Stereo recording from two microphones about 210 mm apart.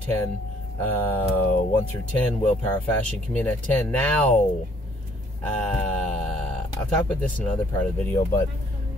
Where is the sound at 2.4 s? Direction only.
5° left (ahead or behind).